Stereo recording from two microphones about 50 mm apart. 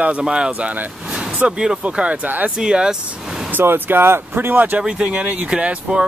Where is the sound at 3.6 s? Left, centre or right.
Right.